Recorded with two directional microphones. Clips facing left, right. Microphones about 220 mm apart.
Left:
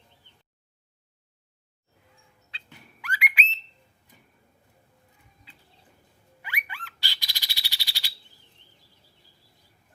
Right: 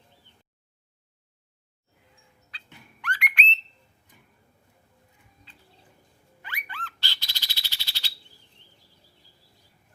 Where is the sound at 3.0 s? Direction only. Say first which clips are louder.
Even; 5° left (ahead or behind).